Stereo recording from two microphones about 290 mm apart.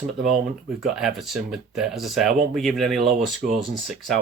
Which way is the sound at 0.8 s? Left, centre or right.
Centre.